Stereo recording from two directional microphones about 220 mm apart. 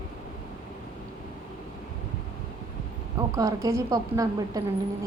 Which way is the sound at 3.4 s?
15° right (ahead or behind).